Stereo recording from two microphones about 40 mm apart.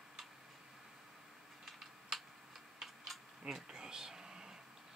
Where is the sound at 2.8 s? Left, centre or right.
Centre.